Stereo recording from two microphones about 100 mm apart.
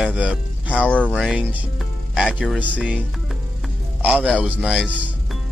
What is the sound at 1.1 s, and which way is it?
Speech, centre (ahead or behind).